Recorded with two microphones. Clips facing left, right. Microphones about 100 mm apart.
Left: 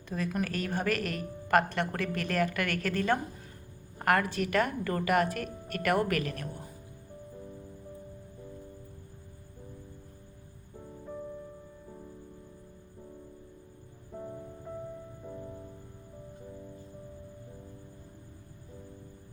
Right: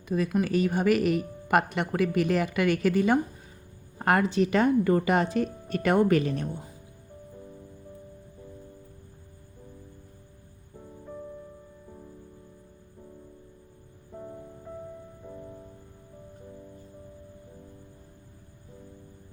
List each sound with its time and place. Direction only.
0.1 s a woman's voice: 10° right (ahead or behind)
10.8 s music: centre (ahead or behind)
14.1 s music: centre (ahead or behind)